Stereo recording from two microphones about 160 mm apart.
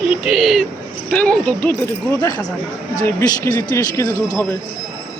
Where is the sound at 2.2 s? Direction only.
25° left (ahead or behind).